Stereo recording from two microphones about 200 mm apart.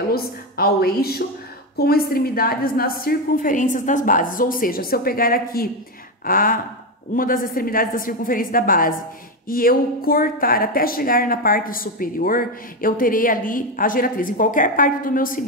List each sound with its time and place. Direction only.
0.1 s a woman's voice: 50° left (ahead or behind)